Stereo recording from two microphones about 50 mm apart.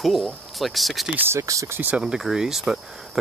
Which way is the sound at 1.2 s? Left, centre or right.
Right.